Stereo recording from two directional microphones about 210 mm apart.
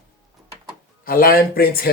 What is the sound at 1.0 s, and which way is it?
Speech, 45° left (ahead or behind).